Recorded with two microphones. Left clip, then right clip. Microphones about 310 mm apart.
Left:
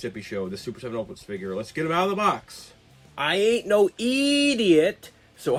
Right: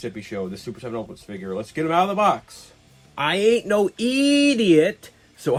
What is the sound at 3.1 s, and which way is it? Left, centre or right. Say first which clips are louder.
Speech: right 3 dB; centre.